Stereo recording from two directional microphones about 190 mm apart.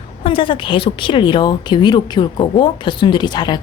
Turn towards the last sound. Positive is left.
turn(degrees=20)  # may be behind; listen again after turning